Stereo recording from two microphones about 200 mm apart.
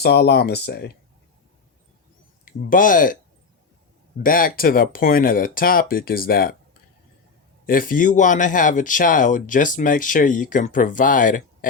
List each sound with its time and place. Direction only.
0.0 s speech: 55° left (ahead or behind)
2.4 s speech: 45° left (ahead or behind)
4.2 s speech: 45° left (ahead or behind)
7.7 s speech: 45° left (ahead or behind)